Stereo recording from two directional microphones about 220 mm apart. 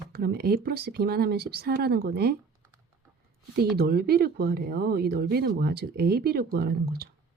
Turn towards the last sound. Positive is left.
turn(degrees=-45)  # may be behind; listen again after turning